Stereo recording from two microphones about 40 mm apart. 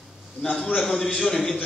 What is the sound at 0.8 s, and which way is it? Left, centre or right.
Speech, centre.